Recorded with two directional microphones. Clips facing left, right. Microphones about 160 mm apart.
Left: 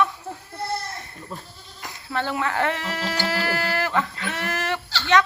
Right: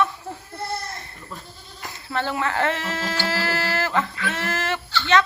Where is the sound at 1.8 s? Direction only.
15° left (ahead or behind).